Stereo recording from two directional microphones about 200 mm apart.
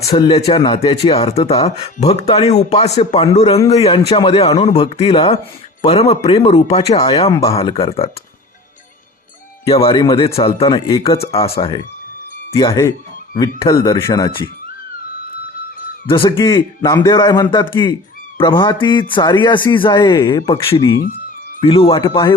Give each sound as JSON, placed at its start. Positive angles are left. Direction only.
{"t": 0.2, "sound": "a man's voice", "side_deg": 30}
{"t": 7.5, "sound": "a man's voice", "side_deg": 30}
{"t": 9.6, "sound": "a man's voice", "side_deg": 25}
{"t": 11.3, "sound": "a man's voice", "side_deg": 30}
{"t": 12.5, "sound": "a man's voice", "side_deg": 20}
{"t": 16.0, "sound": "a man's voice", "side_deg": 25}